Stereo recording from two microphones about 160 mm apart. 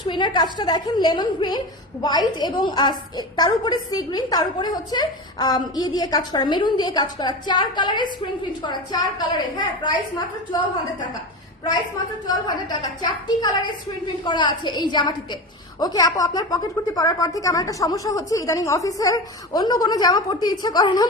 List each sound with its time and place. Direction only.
0.0 s a woman's voice: 25° left (ahead or behind)
12.3 s a woman's voice: 25° left (ahead or behind)